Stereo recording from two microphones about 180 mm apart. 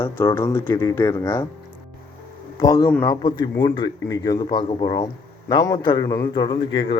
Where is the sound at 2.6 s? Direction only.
20° left (ahead or behind).